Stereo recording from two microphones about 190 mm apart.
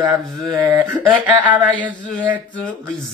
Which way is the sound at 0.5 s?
10° right (ahead or behind).